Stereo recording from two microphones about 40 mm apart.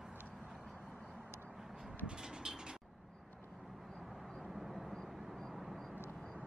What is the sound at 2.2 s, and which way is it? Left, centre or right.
Vehicle, centre.